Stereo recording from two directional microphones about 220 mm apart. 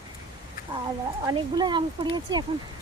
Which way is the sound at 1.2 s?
20° right (ahead or behind).